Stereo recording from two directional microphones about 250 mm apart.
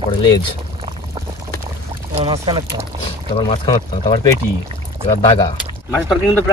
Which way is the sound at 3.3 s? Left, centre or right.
Centre.